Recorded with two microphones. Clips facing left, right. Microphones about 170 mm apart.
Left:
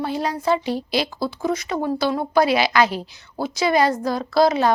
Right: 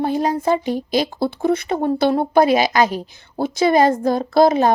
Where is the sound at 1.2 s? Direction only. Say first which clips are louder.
Right 5 dB; 60° right (ahead or behind).